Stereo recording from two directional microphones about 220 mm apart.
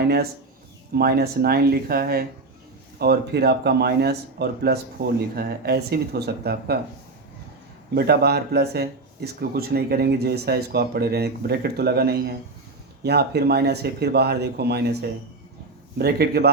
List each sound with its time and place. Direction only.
0.9 s speech: 45° right (ahead or behind)
7.9 s speech: 45° right (ahead or behind)
16.0 s speech: 45° right (ahead or behind)